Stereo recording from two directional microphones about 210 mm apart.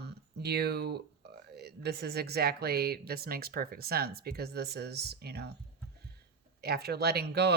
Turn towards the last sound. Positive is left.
turn(degrees=-50)  # may be behind; listen again after turning